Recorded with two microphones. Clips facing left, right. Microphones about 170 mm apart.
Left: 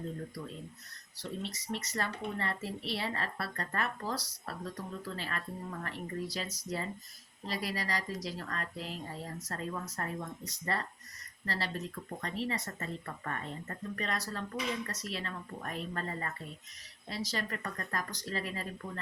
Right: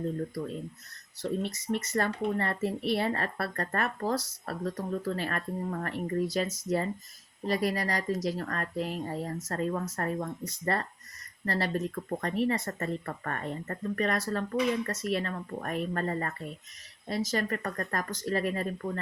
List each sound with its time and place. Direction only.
1.2 s speech: 50° right (ahead or behind)